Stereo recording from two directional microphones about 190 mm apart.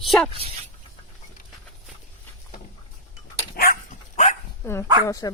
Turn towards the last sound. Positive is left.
turn(degrees=15)  # may be behind; listen again after turning